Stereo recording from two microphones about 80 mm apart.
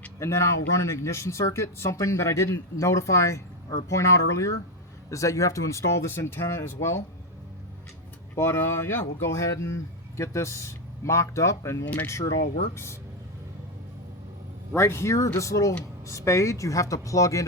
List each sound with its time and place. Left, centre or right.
0.2 s speech: left
8.4 s speech: left
14.8 s speech: left